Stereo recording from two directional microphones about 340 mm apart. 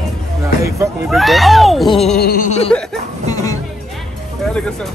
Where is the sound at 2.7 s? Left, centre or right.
Centre.